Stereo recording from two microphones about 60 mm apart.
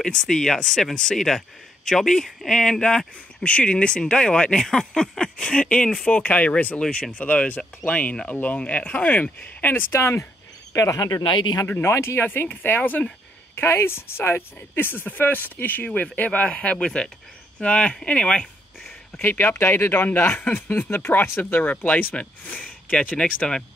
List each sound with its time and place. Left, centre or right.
0.0 s speech: centre; by 9.9 s left
9.9 s speech: left
10.8 s speech: left
11.6 s speech: left
13.6 s speech: left; by 18.5 s centre
19.2 s speech: left
20.2 s speech: left
20.6 s speech: left